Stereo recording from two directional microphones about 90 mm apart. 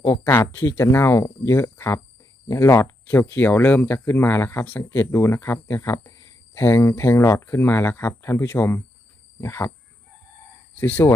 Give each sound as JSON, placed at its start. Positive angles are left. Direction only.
{"t": 0.0, "sound": "speech", "side_deg": 30}
{"t": 10.8, "sound": "speech", "side_deg": 25}